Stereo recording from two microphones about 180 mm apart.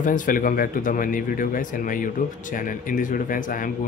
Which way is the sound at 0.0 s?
45° left (ahead or behind).